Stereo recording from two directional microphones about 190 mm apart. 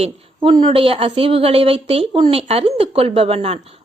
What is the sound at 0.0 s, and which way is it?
A woman's voice, 25° right (ahead or behind).